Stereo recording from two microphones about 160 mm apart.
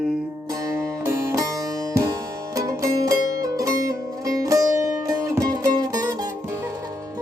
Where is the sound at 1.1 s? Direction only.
15° right (ahead or behind).